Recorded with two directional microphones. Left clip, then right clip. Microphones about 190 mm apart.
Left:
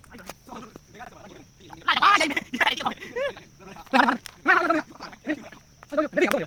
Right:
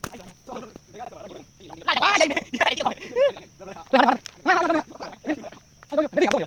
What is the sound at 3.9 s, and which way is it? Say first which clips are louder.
Speech: right 2 dB; 35° left (ahead or behind).